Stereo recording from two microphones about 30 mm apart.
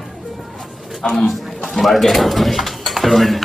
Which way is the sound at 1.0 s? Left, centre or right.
Left.